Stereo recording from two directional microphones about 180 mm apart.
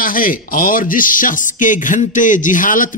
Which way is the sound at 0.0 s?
50° left (ahead or behind).